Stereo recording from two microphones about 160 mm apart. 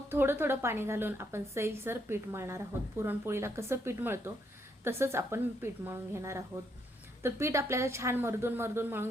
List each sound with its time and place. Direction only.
0.1 s a woman's voice: 15° right (ahead or behind)